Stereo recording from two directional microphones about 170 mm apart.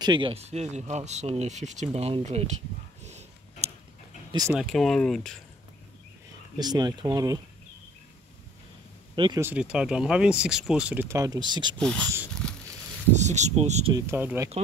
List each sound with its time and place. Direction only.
0.0 s speech: 30° right (ahead or behind)
4.3 s speech: 20° right (ahead or behind)
4.6 s speech: centre (ahead or behind)
6.6 s speech: 25° right (ahead or behind)
9.1 s speech: 30° right (ahead or behind)
9.4 s speech: 10° right (ahead or behind); by 11.7 s 25° right (ahead or behind)
11.8 s speech: 5° left (ahead or behind)
13.1 s speech: 45° right (ahead or behind)
13.9 s speech: 15° right (ahead or behind)